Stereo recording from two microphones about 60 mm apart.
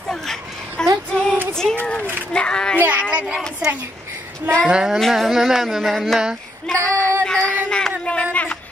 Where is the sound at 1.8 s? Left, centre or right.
Left.